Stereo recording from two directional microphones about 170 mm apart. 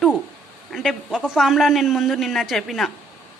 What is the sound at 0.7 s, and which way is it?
A man's voice, centre (ahead or behind).